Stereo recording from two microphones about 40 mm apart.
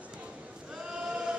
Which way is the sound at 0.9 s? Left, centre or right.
Right.